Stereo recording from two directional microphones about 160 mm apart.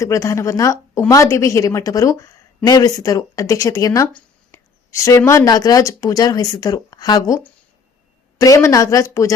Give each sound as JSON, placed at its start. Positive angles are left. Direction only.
{"t": 0.0, "sound": "a woman's voice", "side_deg": 20}